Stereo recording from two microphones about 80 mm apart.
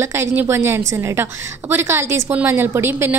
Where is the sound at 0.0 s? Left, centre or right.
Right.